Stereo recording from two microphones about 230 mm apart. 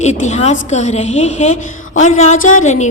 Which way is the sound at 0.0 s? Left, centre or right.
Left.